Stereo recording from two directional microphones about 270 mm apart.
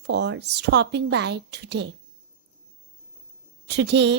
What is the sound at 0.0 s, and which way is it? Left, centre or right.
A woman's voice, right.